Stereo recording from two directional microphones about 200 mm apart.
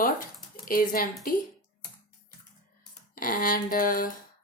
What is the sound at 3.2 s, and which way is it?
Speech, 45° left (ahead or behind).